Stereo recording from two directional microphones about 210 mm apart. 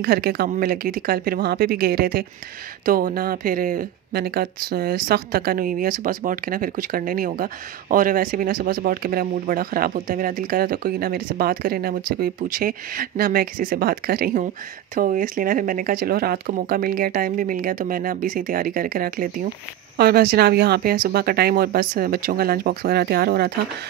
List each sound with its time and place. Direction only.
0.0 s speech: 45° right (ahead or behind)